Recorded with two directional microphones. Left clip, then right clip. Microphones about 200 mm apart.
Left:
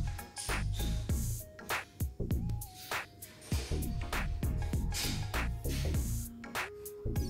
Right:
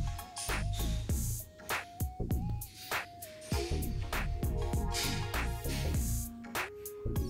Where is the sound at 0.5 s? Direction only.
Centre (ahead or behind).